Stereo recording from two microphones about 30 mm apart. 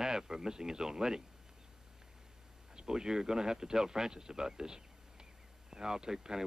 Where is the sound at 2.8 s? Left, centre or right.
Right.